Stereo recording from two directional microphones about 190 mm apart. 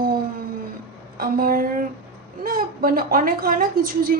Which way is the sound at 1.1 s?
50° right (ahead or behind).